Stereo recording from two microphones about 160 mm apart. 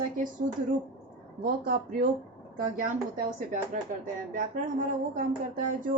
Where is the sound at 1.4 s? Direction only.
65° right (ahead or behind).